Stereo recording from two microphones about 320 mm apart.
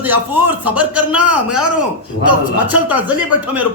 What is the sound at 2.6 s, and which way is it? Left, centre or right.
Speech, centre.